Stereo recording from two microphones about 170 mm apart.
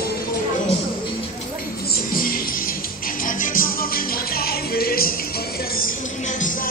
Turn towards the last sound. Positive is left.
turn(degrees=60)  # may be behind; listen again after turning